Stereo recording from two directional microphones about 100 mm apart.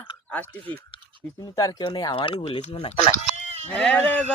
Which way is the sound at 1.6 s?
35° left (ahead or behind).